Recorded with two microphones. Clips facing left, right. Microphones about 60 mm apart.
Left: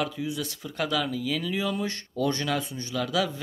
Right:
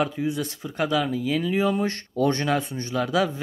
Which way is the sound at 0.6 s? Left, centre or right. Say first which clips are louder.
Right 4 dB; right.